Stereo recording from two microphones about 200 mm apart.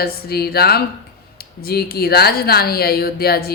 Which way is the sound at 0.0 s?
50° left (ahead or behind).